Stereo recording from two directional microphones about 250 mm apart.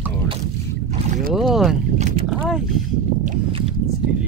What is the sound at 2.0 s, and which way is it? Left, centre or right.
Boat, right.